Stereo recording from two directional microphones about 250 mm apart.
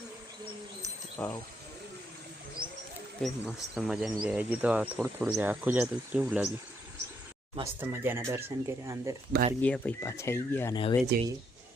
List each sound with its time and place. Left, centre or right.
1.2 s speech: centre
2.6 s wild animals: centre
3.2 s speech: centre
7.5 s speech: centre
9.6 s speech: centre
10.8 s speech: centre